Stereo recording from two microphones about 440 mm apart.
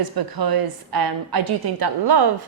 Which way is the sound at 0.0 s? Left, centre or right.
Right.